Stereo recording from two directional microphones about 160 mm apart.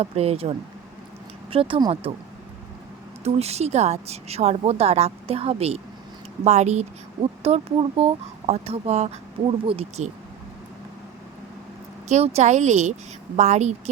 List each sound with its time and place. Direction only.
0.0 s speech: 40° right (ahead or behind)
3.2 s speech: 40° right (ahead or behind)
12.0 s speech: 45° right (ahead or behind)